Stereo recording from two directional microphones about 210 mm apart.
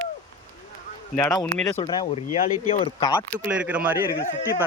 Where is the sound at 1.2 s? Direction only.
10° left (ahead or behind).